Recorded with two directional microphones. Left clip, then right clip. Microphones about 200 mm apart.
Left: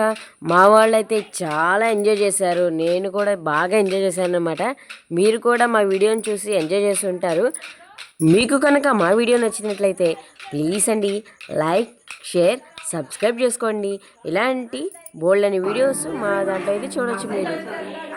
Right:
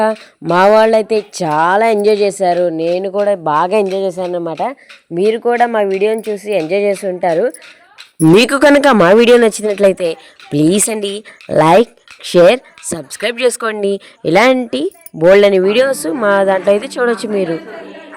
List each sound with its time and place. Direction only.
0.0 s speech: 20° right (ahead or behind)
3.8 s speech: centre (ahead or behind)
8.2 s speech: 35° right (ahead or behind)